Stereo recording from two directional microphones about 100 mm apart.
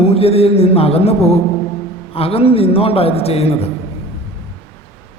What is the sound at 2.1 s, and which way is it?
A man's voice, 75° left (ahead or behind).